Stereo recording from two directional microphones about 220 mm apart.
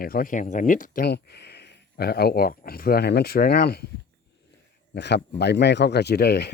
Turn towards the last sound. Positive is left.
turn(degrees=45)  # may be behind; listen again after turning